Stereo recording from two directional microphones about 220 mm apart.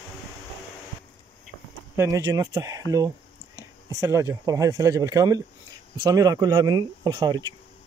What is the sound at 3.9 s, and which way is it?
Speech, 15° right (ahead or behind).